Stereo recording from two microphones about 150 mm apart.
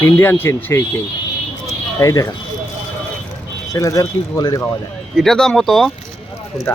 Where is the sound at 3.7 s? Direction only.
20° left (ahead or behind).